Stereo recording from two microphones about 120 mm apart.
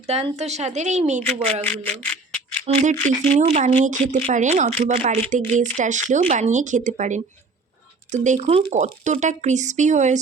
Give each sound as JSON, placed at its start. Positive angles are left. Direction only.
{"t": 0.0, "sound": "a woman's voice", "side_deg": -65}
{"t": 1.6, "sound": "speech", "side_deg": 15}
{"t": 2.6, "sound": "speech", "side_deg": -85}
{"t": 5.3, "sound": "speech", "side_deg": -90}